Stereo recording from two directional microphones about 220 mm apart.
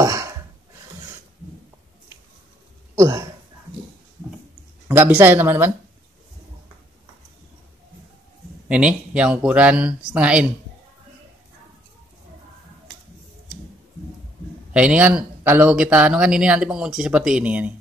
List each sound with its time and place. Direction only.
0.0 s a sound: 15° right (ahead or behind)
3.0 s speech: 15° right (ahead or behind)
4.8 s speech: 10° right (ahead or behind)
8.6 s speech: 5° right (ahead or behind)
14.7 s speech: 5° right (ahead or behind)